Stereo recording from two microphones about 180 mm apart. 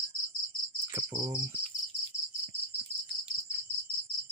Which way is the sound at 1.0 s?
15° right (ahead or behind).